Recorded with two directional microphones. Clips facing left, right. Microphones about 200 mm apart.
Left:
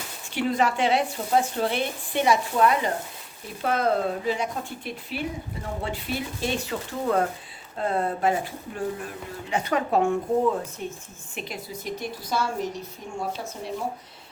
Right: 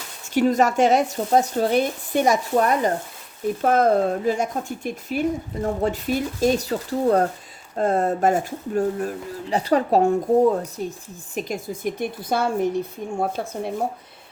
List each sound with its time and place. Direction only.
0.3 s a woman's voice: 45° right (ahead or behind)